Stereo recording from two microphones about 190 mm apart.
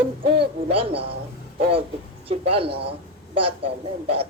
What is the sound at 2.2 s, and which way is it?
Speech, 30° right (ahead or behind).